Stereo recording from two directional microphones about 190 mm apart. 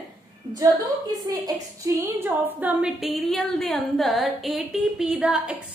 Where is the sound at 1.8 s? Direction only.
10° right (ahead or behind).